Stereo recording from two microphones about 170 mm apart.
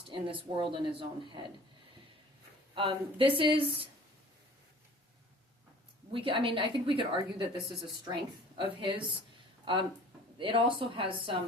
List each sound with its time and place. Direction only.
0.1 s speech: 30° right (ahead or behind)
2.7 s a woman's voice: 30° right (ahead or behind)
6.1 s a woman's voice: 30° right (ahead or behind)
10.3 s a woman's voice: 30° right (ahead or behind)